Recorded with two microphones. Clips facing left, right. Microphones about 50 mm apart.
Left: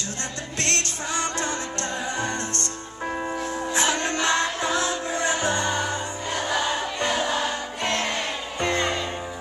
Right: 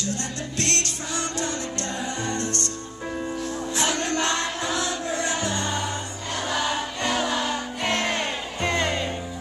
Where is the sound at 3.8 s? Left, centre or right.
Left.